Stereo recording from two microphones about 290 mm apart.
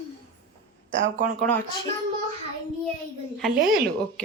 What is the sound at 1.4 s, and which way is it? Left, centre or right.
Speech, centre.